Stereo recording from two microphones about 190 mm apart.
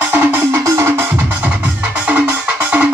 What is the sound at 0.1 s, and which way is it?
Music, 10° right (ahead or behind).